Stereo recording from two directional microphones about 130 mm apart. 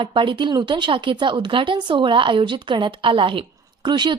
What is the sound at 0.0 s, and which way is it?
A woman's voice, 40° right (ahead or behind).